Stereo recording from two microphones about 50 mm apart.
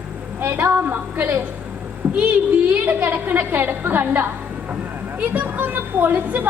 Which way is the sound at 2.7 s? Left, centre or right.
Right.